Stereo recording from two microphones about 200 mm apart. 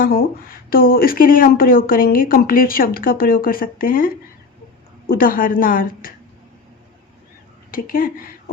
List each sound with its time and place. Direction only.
0.0 s speech: 45° left (ahead or behind)
7.7 s speech: 45° left (ahead or behind)